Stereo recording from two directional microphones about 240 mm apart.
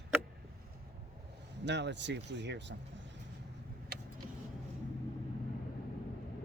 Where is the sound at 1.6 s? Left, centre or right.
Right.